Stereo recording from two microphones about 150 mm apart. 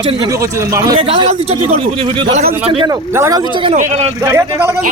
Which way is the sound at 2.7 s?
25° right (ahead or behind).